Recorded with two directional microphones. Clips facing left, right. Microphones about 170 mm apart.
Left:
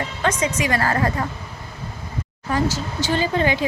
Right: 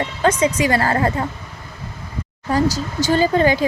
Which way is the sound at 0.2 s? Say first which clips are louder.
Right 5 dB; 30° right (ahead or behind).